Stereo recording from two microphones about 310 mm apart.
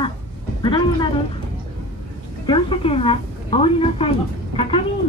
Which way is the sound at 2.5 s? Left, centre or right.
Centre.